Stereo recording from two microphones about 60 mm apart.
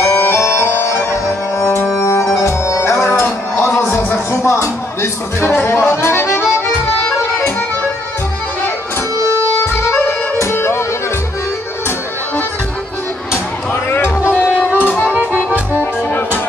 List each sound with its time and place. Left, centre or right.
0.0 s bagpipes: left
1.6 s music: left
5.9 s accordion: left
9.8 s music: left
13.8 s music: left